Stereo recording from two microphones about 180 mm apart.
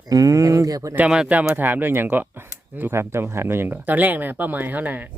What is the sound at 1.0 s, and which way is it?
Speech, 5° right (ahead or behind).